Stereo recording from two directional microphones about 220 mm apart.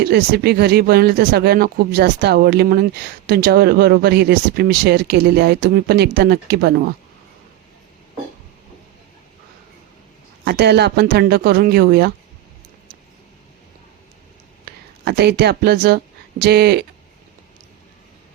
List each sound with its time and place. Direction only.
0.0 s speech: 45° right (ahead or behind)
10.4 s speech: 50° right (ahead or behind)
14.6 s speech: 50° right (ahead or behind)